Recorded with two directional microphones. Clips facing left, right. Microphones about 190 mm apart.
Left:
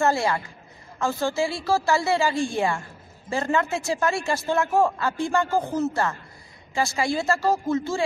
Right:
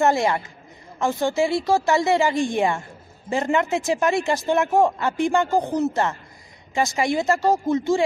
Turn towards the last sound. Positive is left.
turn(degrees=-20)  # may be behind; listen again after turning